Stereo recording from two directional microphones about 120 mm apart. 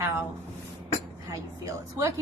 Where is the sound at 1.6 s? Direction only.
25° right (ahead or behind).